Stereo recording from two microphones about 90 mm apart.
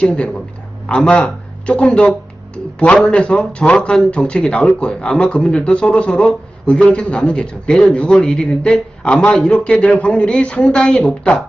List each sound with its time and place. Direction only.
0.0 s a man's voice: 15° left (ahead or behind)